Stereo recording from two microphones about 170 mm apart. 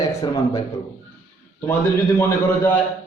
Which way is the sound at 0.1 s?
20° left (ahead or behind).